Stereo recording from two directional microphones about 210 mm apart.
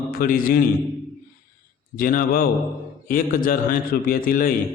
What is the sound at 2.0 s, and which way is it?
A man's voice, 40° left (ahead or behind).